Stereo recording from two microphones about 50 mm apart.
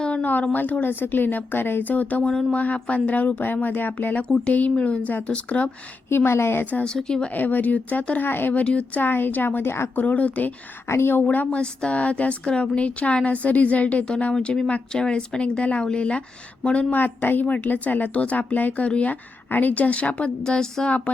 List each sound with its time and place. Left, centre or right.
0.0 s a woman's voice: left
4.5 s a woman's voice: left
6.1 s a woman's voice: left
6.8 s speech: centre
7.3 s a woman's voice: left
8.3 s a woman's voice: left
8.5 s a woman's voice: left
9.0 s a woman's voice: left
9.9 s a woman's voice: left
10.8 s a woman's voice: left
11.1 s a woman's voice: left
11.6 s a woman's voice: left
14.3 s a woman's voice: centre
16.9 s a woman's voice: left; by 20.9 s centre